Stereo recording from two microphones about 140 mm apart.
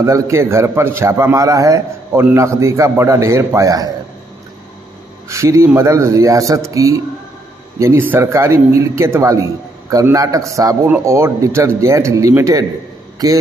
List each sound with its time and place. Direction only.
0.0 s a man's voice: 20° right (ahead or behind)
5.3 s a man's voice: 20° right (ahead or behind)